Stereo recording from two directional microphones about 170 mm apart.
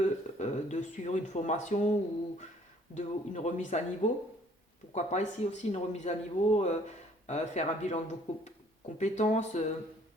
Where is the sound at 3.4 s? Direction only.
45° left (ahead or behind).